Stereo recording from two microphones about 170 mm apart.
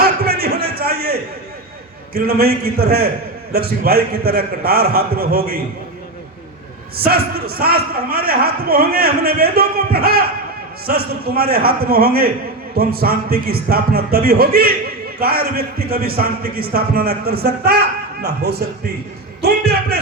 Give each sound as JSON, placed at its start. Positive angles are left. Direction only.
{"t": 0.0, "sound": "a sound", "side_deg": -65}
{"t": 2.1, "sound": "a man's voice", "side_deg": -65}
{"t": 7.0, "sound": "a man's voice", "side_deg": -65}